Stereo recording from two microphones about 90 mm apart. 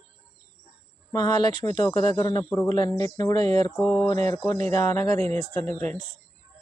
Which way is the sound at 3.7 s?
Centre (ahead or behind).